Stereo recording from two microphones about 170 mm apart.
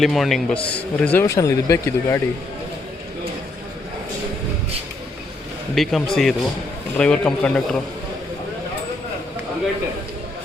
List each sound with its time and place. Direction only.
0.0 s a man's voice: centre (ahead or behind); by 2.2 s 15° left (ahead or behind)
5.7 s a man's voice: centre (ahead or behind)